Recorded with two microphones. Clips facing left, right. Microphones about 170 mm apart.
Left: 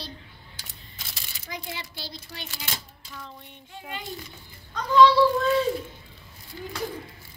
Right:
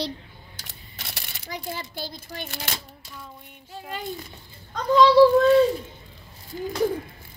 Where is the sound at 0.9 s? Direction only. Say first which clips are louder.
Right 6 dB; 65° right (ahead or behind).